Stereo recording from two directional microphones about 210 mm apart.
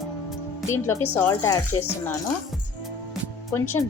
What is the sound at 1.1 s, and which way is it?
Speech, 10° left (ahead or behind).